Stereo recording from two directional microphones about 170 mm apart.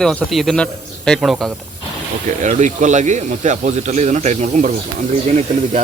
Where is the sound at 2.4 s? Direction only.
45° right (ahead or behind).